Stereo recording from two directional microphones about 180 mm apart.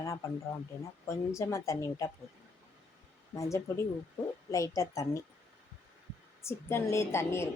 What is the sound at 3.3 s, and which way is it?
A woman's voice, 15° left (ahead or behind).